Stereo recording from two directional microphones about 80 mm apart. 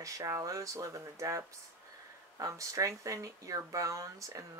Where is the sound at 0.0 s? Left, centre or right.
Right.